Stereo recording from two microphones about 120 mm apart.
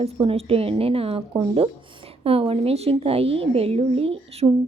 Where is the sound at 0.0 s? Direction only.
55° right (ahead or behind).